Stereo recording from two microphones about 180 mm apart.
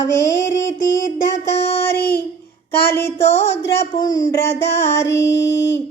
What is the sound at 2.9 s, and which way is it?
Music, 15° left (ahead or behind).